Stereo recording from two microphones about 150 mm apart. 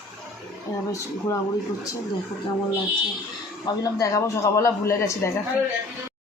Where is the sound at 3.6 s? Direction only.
25° left (ahead or behind).